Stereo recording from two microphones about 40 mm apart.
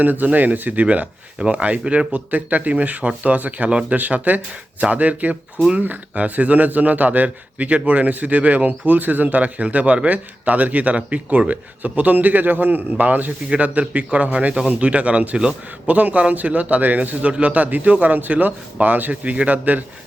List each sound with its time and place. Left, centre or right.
0.0 s a man's voice: right
1.4 s speech: right
3.7 s speech: right
3.9 s a man's voice: right